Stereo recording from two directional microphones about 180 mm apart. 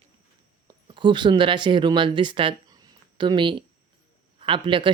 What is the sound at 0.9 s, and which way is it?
Speech, 25° right (ahead or behind).